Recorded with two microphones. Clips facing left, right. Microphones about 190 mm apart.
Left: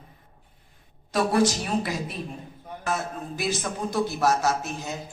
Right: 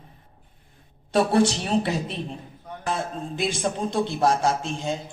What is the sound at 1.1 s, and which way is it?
A man's voice, 30° right (ahead or behind).